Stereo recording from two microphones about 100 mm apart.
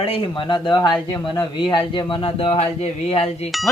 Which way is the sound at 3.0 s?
90° left.